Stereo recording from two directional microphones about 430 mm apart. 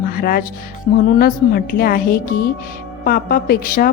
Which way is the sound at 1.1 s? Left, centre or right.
Centre.